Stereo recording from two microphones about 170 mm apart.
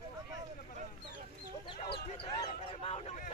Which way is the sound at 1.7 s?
30° left (ahead or behind).